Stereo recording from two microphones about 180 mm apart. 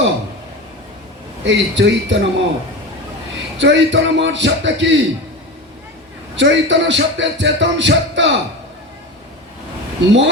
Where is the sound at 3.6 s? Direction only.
85° right.